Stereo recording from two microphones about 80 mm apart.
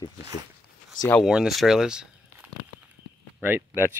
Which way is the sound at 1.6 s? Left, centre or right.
Centre.